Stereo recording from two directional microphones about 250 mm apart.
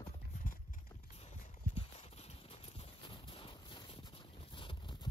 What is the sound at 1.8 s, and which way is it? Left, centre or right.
Clip-clop, left.